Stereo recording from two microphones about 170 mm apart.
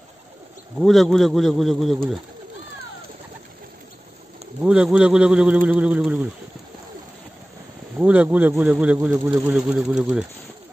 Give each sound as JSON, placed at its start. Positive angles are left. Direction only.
{"t": 0.7, "sound": "a man's voice", "side_deg": 0}
{"t": 4.6, "sound": "speech", "side_deg": -5}
{"t": 8.0, "sound": "speech", "side_deg": -10}